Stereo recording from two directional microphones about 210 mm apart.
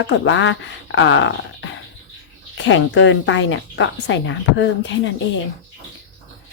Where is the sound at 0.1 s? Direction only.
65° left (ahead or behind).